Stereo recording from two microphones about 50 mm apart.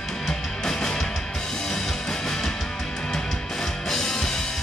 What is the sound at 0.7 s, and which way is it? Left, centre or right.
Music, centre.